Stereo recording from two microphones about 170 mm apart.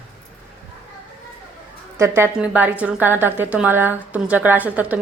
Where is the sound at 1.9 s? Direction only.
15° right (ahead or behind).